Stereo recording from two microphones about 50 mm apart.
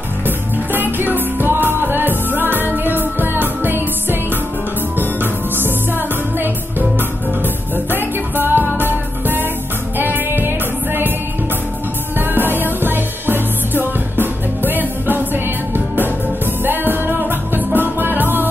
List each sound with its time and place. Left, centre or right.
0.7 s music: right
12.2 s music: right